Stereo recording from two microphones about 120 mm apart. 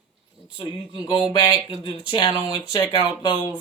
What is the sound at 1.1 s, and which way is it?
Speech, 40° left (ahead or behind).